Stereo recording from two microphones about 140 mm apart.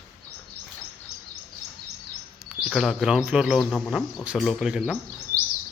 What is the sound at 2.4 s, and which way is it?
Speech, 5° right (ahead or behind).